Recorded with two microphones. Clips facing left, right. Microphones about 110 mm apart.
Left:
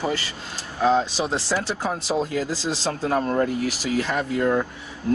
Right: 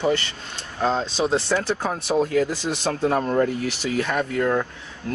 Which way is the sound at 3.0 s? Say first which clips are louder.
Right 2 dB; 25° right (ahead or behind).